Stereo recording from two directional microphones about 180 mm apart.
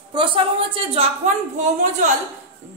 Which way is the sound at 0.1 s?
25° right (ahead or behind).